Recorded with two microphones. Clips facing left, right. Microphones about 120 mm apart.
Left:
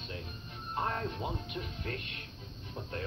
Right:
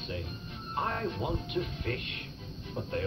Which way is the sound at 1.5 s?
35° left (ahead or behind).